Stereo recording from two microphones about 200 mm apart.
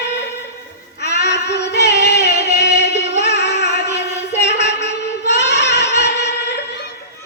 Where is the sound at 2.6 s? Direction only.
55° left (ahead or behind).